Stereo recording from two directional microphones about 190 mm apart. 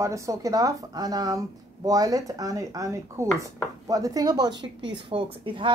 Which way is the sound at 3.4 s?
15° right (ahead or behind).